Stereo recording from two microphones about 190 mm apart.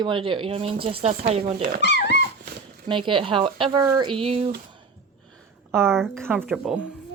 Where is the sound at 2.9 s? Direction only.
25° right (ahead or behind).